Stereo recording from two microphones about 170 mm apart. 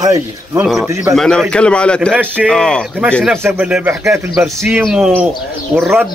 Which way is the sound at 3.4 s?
5° right (ahead or behind).